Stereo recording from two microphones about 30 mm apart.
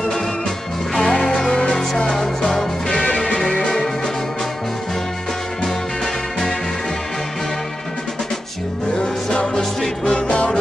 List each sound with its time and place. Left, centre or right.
0.9 s music: left
8.9 s music: left
10.2 s music: left